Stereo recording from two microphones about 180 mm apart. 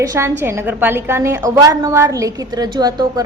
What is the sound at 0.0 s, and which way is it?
A woman's voice, 15° right (ahead or behind).